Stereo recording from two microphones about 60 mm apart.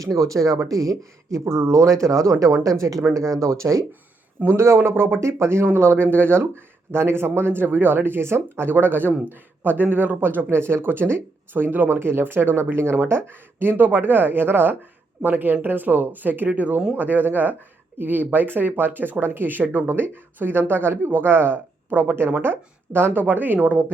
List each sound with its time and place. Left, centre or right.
0.0 s speech: right
4.4 s a woman's voice: right